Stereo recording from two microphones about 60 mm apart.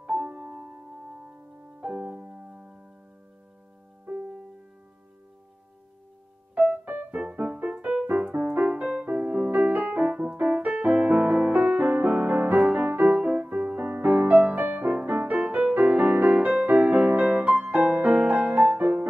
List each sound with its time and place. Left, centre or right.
0.0 s music: right
2.1 s music: right
4.1 s music: right
6.8 s music: right